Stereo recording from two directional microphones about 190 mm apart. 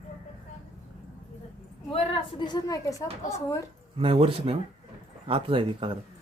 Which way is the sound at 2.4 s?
20° left (ahead or behind).